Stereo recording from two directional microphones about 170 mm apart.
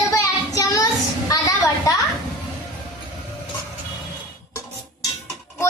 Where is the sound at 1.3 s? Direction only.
20° left (ahead or behind).